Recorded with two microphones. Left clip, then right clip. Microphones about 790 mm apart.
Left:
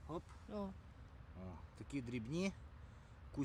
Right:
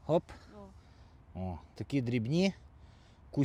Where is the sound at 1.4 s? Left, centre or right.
Right.